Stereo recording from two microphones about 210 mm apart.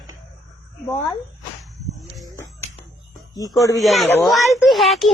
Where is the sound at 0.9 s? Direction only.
15° left (ahead or behind).